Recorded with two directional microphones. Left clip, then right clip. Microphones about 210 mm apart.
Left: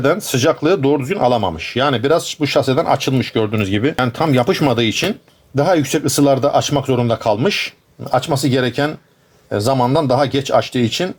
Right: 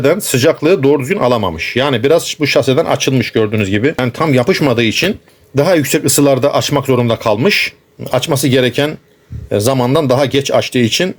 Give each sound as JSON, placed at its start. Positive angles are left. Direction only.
{"t": 0.0, "sound": "speech", "side_deg": -25}